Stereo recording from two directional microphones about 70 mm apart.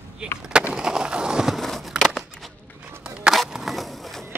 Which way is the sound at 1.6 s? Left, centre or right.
Centre.